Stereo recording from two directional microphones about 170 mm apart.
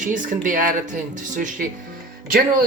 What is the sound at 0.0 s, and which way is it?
Speech, 50° right (ahead or behind).